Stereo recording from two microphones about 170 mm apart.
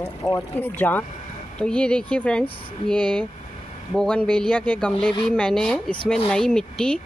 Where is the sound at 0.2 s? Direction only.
20° left (ahead or behind).